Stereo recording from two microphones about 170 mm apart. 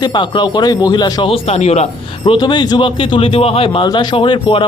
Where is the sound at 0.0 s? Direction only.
25° left (ahead or behind).